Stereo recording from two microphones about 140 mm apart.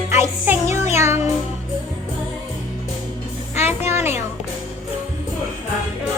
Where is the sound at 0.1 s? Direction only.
15° right (ahead or behind).